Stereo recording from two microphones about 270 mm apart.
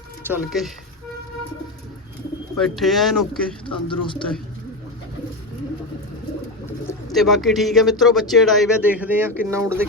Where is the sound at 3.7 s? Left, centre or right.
Centre.